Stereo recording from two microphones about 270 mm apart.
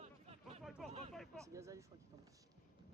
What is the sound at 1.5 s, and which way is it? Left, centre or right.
Speech, centre.